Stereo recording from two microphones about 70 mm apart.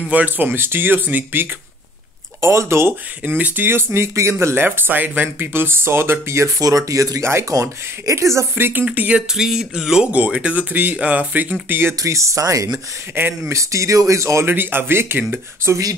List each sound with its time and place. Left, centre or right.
0.1 s speech: right
2.4 s speech: right
3.3 s speech: right
4.6 s speech: right
6.6 s speech: right
7.2 s speech: right
7.5 s speech: right
8.9 s speech: right
9.3 s a sound: centre
10.1 s speech: centre
12.0 s speech: right
13.2 s speech: right
13.5 s speech: right
14.4 s speech: right